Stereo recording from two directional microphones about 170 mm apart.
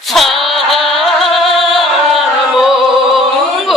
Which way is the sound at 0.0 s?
Centre (ahead or behind).